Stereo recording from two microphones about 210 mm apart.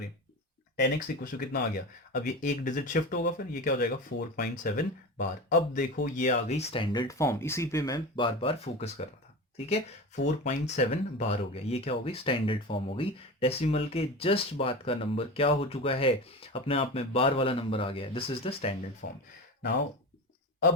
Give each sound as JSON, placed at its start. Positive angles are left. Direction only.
{"t": 0.9, "sound": "speech", "side_deg": 40}
{"t": 19.0, "sound": "speech", "side_deg": 40}